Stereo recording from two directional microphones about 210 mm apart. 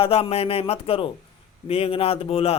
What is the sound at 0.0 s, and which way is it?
Speech, 30° left (ahead or behind).